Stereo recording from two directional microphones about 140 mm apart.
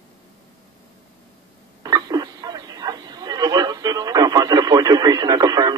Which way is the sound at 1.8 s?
25° right (ahead or behind).